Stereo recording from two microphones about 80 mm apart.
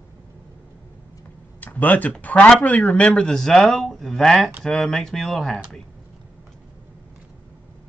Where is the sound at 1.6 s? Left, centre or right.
Left; by 5.8 s centre.